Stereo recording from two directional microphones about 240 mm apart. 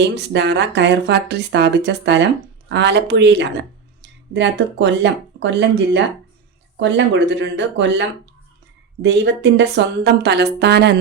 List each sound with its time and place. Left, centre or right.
0.0 s speech: right